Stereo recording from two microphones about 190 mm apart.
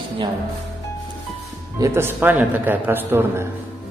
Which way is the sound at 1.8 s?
15° right (ahead or behind).